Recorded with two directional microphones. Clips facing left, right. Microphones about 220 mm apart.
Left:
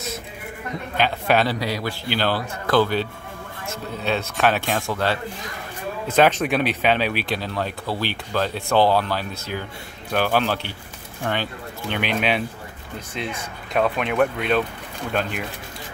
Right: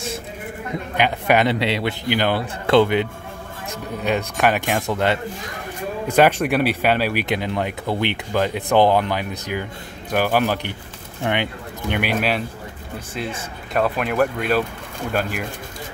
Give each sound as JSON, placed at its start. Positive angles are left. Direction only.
{"t": 0.9, "sound": "speech", "side_deg": -15}
{"t": 13.7, "sound": "speech", "side_deg": 0}